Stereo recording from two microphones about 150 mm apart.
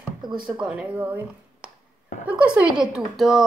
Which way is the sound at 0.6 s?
5° right (ahead or behind).